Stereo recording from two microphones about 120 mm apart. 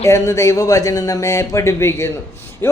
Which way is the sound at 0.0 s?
25° left (ahead or behind).